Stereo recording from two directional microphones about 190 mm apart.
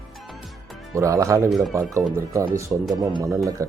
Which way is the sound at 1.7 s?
15° right (ahead or behind).